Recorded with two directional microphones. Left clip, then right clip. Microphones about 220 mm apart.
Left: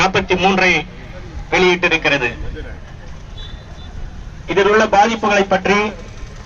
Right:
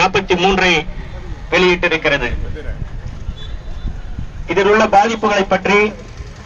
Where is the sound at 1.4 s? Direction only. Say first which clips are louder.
Even; 35° right (ahead or behind).